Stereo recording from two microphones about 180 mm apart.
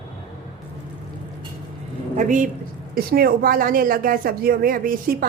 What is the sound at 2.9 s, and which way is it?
A woman's voice, 55° right (ahead or behind).